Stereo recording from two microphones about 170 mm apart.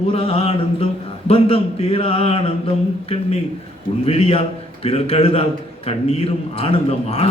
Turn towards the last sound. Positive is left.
turn(degrees=35)  # may be behind; listen again after turning